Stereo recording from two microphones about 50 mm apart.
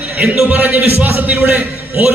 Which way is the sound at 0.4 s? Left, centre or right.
Right.